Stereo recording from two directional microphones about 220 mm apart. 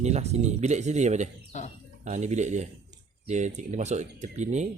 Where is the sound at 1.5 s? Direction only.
30° left (ahead or behind).